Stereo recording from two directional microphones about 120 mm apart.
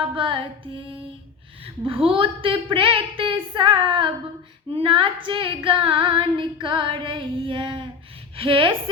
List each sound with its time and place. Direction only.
0.2 s female singing: 45° right (ahead or behind)